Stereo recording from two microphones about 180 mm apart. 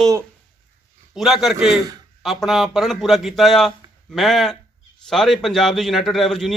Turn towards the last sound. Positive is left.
turn(degrees=0)  # may be behind; listen again after turning